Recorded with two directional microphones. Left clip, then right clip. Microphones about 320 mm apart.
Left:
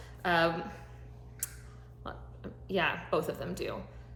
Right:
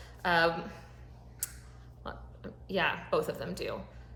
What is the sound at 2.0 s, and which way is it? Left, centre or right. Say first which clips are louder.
A woman's voice: right 1 dB; centre.